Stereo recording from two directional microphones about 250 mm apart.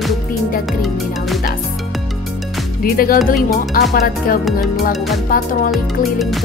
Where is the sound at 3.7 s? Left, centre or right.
Left.